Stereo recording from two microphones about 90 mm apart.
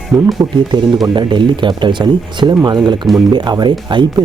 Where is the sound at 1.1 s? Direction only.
60° right (ahead or behind).